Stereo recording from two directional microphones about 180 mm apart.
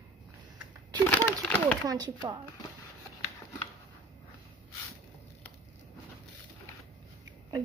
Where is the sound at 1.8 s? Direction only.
20° right (ahead or behind).